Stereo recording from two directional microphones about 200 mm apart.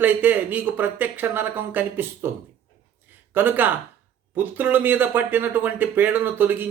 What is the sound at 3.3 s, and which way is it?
Speech, 10° right (ahead or behind).